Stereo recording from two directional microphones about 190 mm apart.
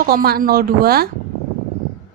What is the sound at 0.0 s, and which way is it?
A woman's voice, 50° right (ahead or behind).